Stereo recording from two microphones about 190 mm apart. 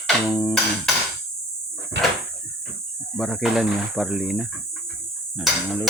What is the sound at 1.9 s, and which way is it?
Cupboard open or close, 65° right (ahead or behind).